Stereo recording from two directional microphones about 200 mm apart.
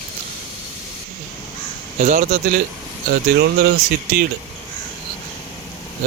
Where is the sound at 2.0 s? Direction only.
40° right (ahead or behind).